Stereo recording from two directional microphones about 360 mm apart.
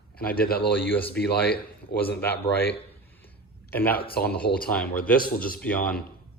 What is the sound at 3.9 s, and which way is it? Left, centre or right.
Speech, left.